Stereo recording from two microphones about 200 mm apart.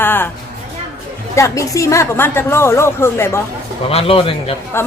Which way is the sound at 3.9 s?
30° left (ahead or behind).